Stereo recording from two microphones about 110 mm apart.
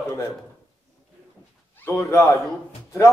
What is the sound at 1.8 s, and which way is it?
Speech, 25° left (ahead or behind).